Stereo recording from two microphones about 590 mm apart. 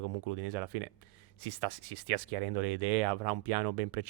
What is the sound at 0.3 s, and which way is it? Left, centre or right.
Speech, right.